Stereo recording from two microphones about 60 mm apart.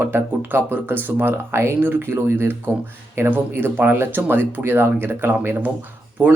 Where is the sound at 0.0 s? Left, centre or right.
Right.